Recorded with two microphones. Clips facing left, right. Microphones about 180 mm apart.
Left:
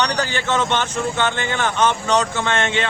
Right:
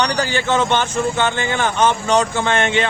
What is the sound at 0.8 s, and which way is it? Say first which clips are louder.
Speech: right 3 dB; 10° right (ahead or behind).